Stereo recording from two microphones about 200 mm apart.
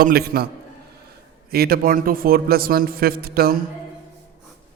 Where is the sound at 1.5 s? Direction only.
50° right (ahead or behind).